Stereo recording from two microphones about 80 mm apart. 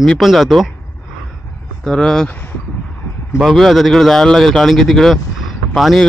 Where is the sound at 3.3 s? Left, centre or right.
Centre.